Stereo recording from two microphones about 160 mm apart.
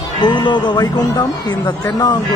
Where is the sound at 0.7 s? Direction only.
20° left (ahead or behind).